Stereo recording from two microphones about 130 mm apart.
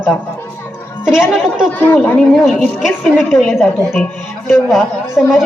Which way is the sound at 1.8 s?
15° left (ahead or behind).